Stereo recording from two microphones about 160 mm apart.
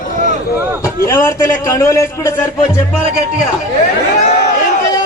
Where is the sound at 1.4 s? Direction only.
15° left (ahead or behind).